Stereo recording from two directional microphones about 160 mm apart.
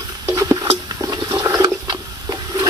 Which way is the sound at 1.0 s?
20° right (ahead or behind).